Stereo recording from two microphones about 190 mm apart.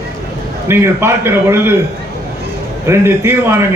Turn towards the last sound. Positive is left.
turn(degrees=-15)  # may be behind; listen again after turning